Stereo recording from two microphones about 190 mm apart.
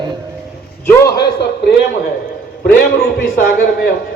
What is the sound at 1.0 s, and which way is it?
Speech, 60° left (ahead or behind).